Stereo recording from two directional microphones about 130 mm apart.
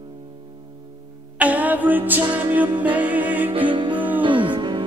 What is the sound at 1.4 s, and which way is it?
Music, 10° right (ahead or behind).